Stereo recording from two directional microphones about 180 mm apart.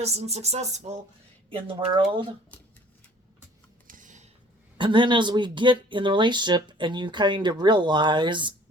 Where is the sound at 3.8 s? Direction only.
45° right (ahead or behind).